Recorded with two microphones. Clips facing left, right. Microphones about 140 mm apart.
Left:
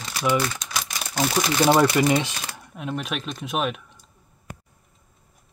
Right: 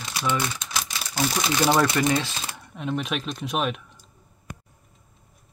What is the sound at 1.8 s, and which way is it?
Speech, 15° left (ahead or behind).